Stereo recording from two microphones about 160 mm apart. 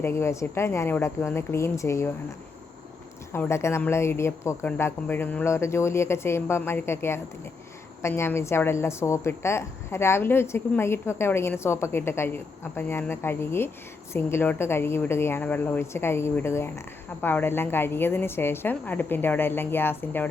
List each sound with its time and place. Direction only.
0.0 s a woman's voice: 15° left (ahead or behind)
3.3 s a woman's voice: 15° left (ahead or behind)